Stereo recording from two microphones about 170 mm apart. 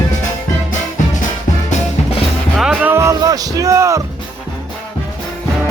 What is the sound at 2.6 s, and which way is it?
Music, 5° right (ahead or behind).